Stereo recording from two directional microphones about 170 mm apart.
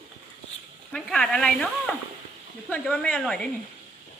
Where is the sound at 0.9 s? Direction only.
5° left (ahead or behind).